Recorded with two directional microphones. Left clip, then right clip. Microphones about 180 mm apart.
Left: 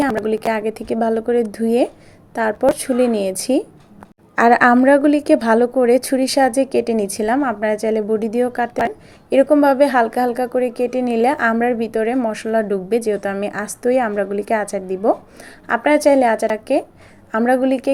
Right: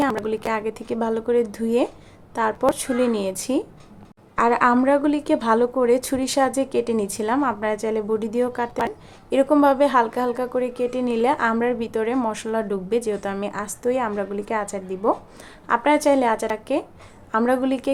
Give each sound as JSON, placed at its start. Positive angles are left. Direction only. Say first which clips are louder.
{"t": 0.3, "sound": "a woman's voice", "louder": "left 5 dB", "side_deg": 15}